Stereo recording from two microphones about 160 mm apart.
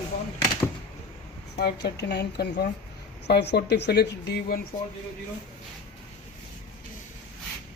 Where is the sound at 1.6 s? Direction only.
90° left.